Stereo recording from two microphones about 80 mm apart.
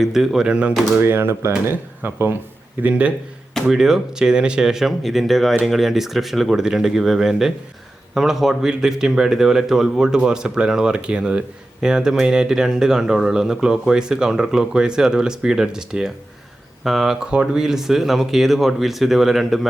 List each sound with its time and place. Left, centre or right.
0.0 s speech: centre
0.9 s speech: right
2.8 s speech: centre